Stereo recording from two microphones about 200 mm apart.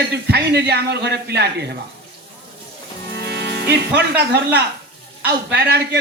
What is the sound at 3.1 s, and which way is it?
A man's voice, 55° right (ahead or behind).